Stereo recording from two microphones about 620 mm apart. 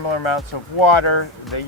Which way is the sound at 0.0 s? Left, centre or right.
Left.